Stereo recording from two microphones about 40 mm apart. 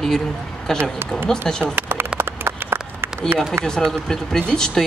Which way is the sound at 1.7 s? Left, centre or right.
Right.